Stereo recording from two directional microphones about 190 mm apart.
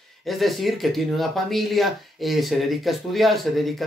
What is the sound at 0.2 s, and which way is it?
Speech, centre (ahead or behind).